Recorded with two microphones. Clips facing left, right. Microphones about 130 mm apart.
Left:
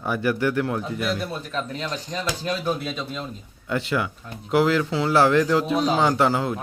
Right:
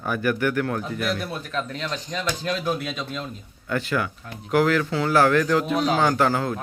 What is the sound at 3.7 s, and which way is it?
Speech, 20° left (ahead or behind).